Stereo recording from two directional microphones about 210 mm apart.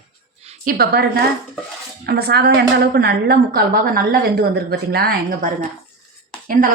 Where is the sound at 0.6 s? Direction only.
45° right (ahead or behind).